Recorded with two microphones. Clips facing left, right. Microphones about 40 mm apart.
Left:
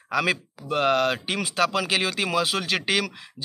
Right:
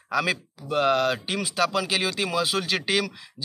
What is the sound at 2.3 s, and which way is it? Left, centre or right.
Speech, left.